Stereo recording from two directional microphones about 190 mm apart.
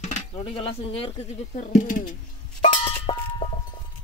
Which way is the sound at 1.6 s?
45° left (ahead or behind).